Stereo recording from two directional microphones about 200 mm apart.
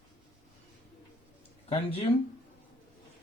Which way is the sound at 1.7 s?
30° left (ahead or behind).